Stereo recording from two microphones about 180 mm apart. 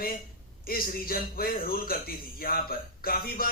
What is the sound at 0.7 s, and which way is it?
A man's voice, 55° left (ahead or behind).